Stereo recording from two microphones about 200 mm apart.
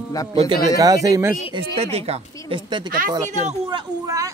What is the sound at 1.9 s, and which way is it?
Speech, 30° right (ahead or behind).